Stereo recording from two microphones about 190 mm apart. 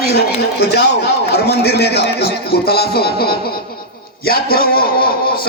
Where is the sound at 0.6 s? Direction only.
60° left (ahead or behind).